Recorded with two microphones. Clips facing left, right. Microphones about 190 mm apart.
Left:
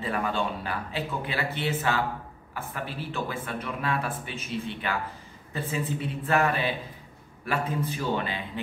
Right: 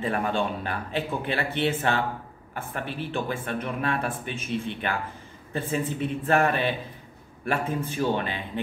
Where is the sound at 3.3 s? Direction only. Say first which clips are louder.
Right 3 dB; 50° right (ahead or behind).